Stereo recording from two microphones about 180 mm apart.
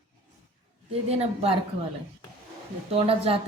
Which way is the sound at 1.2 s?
35° right (ahead or behind).